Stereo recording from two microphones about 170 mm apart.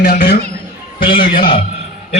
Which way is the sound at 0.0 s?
60° left (ahead or behind).